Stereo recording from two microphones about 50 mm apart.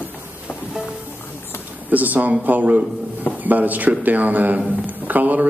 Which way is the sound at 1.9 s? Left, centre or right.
Right.